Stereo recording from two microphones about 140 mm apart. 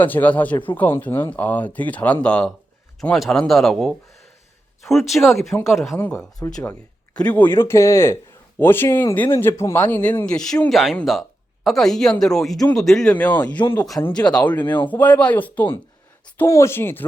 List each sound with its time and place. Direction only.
0.0 s speech: 10° left (ahead or behind)
6.0 s speech: 15° left (ahead or behind)